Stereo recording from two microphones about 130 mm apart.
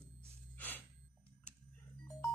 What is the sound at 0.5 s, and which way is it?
Music, 15° left (ahead or behind).